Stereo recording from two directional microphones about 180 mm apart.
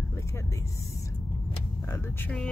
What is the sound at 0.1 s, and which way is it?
Speech, 15° left (ahead or behind).